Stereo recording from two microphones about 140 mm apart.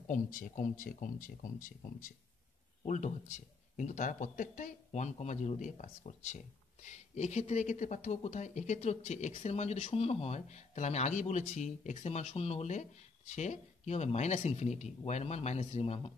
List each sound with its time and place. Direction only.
0.1 s speech: 70° left (ahead or behind)
2.8 s speech: 60° left (ahead or behind)